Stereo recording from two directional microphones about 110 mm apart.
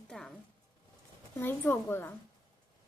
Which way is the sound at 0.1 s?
5° left (ahead or behind).